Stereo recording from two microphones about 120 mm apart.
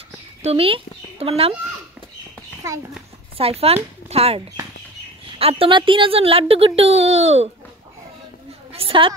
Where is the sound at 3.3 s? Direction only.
55° right (ahead or behind).